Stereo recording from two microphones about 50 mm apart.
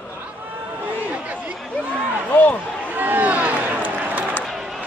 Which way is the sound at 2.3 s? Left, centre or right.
Left.